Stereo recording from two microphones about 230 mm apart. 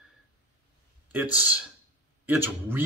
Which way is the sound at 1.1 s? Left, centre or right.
Centre.